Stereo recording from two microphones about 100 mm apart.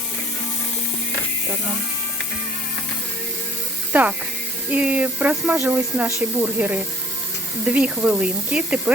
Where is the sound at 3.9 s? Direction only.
15° right (ahead or behind).